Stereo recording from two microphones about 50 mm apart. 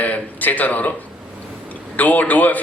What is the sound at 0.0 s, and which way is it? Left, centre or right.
A man's voice, left.